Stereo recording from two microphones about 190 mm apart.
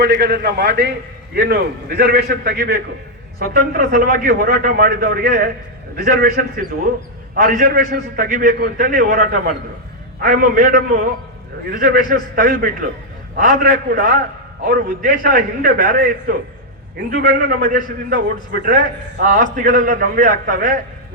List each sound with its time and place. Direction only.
0.0 s a man's voice: 55° right (ahead or behind)
12.4 s a man's voice: 45° right (ahead or behind)